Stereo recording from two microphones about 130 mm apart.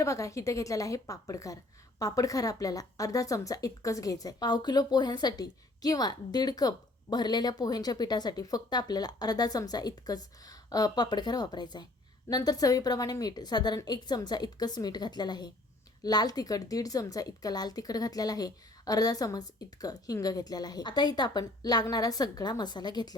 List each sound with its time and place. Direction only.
0.0 s a woman's voice: 25° left (ahead or behind)